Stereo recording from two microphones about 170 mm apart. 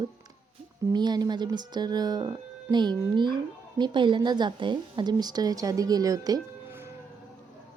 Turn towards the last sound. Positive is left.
turn(degrees=-15)  # may be behind; listen again after turning